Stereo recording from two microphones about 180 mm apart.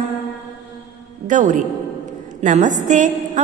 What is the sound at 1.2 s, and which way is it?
A man's voice, 45° right (ahead or behind).